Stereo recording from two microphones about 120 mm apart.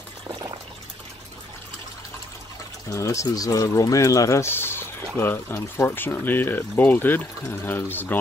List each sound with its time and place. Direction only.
0.3 s water: 30° right (ahead or behind)
2.9 s speech: 25° left (ahead or behind)